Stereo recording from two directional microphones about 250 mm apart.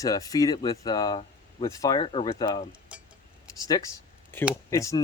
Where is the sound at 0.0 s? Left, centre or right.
Centre.